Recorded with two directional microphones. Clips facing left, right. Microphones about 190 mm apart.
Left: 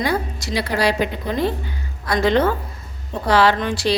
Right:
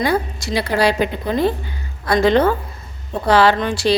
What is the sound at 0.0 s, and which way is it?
Speech, 55° right (ahead or behind).